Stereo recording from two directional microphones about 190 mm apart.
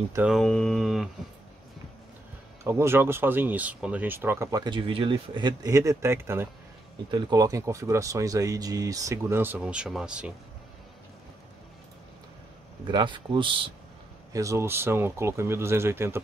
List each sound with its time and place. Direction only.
0.1 s speech: 5° right (ahead or behind)
2.6 s speech: 15° right (ahead or behind)
12.8 s speech: 25° right (ahead or behind)
14.3 s speech: 15° right (ahead or behind)